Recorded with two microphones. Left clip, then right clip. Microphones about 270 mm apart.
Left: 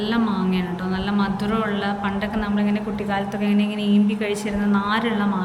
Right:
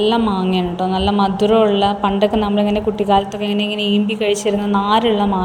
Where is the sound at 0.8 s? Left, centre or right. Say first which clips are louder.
Right 9 dB; centre.